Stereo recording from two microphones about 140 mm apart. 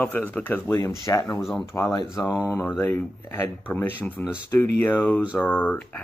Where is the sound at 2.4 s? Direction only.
20° left (ahead or behind).